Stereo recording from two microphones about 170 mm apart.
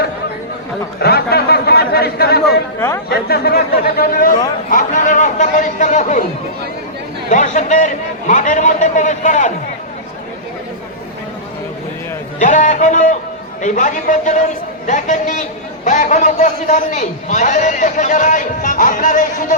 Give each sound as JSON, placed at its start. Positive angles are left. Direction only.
{"t": 0.9, "sound": "a man's voice", "side_deg": 70}
{"t": 7.3, "sound": "a man's voice", "side_deg": 45}
{"t": 12.4, "sound": "a man's voice", "side_deg": 45}